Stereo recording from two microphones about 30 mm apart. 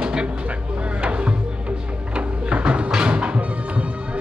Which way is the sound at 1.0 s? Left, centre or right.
Right.